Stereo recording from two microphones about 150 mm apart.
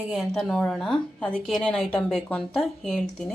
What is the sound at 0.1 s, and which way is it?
A woman's voice, centre (ahead or behind).